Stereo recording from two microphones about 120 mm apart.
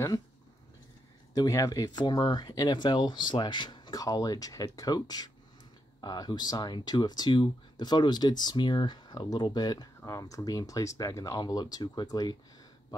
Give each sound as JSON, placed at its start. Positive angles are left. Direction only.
{"t": 1.3, "sound": "speech", "side_deg": 30}